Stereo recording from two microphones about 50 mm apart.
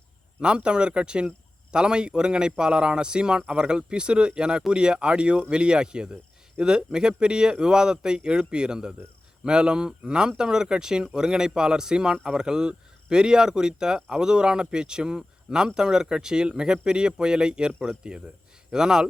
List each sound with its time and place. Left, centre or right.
0.4 s speech: centre